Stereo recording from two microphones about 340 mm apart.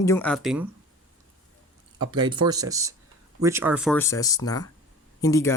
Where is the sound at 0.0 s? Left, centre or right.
Centre.